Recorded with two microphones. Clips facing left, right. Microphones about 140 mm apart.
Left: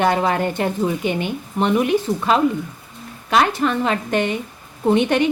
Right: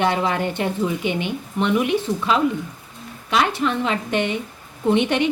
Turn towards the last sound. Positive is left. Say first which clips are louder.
# left 2 dB
turn(degrees=45)  # may be behind; listen again after turning